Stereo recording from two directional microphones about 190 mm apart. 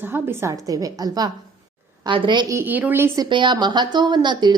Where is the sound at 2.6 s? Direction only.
10° right (ahead or behind).